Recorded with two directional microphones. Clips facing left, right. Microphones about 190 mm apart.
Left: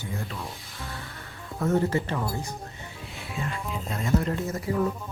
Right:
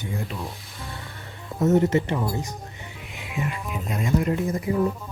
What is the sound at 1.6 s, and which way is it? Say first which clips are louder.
Speech: right 5 dB; 20° right (ahead or behind).